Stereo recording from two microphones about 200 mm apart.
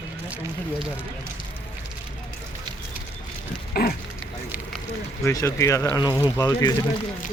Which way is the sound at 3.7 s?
50° left (ahead or behind).